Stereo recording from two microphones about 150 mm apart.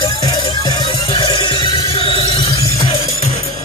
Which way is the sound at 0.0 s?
30° left (ahead or behind).